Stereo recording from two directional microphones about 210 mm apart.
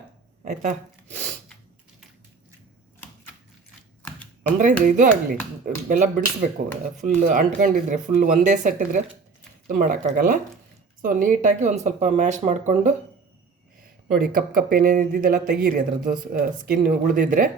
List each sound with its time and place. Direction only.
0.4 s speech: 35° right (ahead or behind)
4.5 s speech: 40° right (ahead or behind)
14.1 s speech: 40° right (ahead or behind)